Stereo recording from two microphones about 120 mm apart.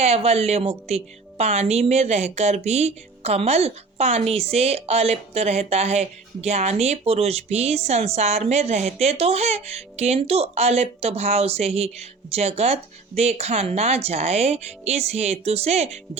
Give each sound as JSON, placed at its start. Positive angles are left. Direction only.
{"t": 0.0, "sound": "a woman's voice", "side_deg": -60}